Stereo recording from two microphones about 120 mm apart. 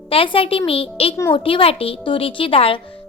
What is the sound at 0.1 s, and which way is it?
A woman's voice, 50° left (ahead or behind).